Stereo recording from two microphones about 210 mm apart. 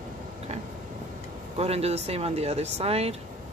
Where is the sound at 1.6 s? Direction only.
30° right (ahead or behind).